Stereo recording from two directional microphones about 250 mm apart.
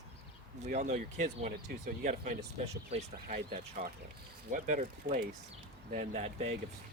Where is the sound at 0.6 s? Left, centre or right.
Right.